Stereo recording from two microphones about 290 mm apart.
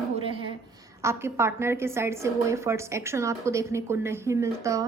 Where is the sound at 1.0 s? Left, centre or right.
Centre.